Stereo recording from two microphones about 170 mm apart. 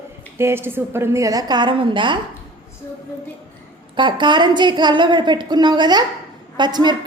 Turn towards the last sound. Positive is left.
turn(degrees=-25)  # may be behind; listen again after turning